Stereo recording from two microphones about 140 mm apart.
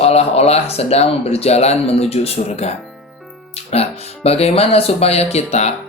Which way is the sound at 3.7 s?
45° left (ahead or behind).